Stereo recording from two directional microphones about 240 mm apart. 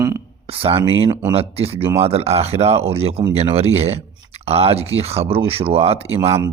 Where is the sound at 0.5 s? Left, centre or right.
Right.